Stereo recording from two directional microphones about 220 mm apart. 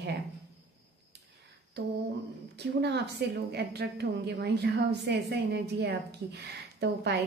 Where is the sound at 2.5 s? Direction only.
50° right (ahead or behind).